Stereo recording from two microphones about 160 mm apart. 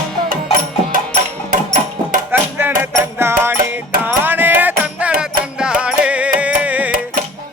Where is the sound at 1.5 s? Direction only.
55° right (ahead or behind).